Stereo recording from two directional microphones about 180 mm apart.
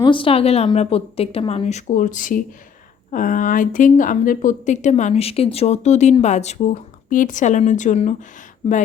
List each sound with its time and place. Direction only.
0.0 s speech: 30° left (ahead or behind)